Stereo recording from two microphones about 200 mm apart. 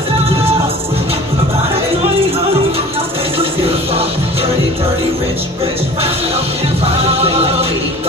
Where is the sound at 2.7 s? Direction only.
30° right (ahead or behind).